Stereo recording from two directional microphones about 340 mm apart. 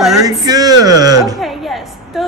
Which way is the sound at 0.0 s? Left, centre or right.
Centre.